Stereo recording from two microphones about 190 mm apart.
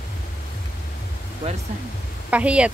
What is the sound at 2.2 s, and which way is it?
Speech, 5° right (ahead or behind).